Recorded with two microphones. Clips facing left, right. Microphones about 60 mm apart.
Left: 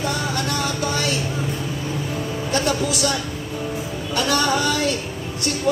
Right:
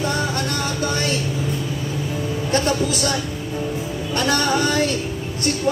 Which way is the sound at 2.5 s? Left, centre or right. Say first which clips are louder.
Right 1 dB; right.